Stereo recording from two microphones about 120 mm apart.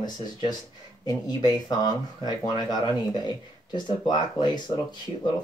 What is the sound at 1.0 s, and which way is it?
Speech, 35° left (ahead or behind).